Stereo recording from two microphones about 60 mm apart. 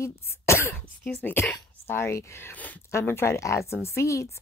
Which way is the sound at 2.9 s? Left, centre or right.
Left.